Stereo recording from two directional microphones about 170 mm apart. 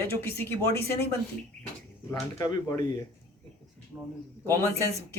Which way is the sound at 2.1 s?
25° left (ahead or behind).